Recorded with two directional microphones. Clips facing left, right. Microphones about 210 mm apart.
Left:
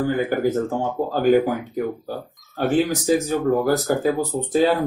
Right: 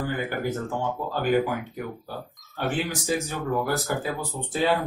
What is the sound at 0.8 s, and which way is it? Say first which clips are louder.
Speech: left 6 dB; 45° left (ahead or behind).